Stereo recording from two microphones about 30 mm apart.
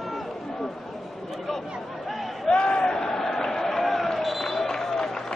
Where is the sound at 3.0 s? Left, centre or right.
Centre.